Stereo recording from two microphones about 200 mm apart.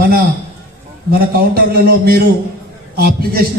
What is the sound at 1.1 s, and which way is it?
A man's voice, 50° right (ahead or behind).